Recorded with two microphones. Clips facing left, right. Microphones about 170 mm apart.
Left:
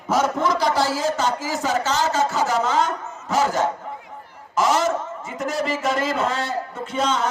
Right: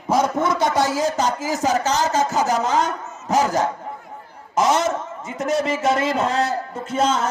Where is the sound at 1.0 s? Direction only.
40° right (ahead or behind).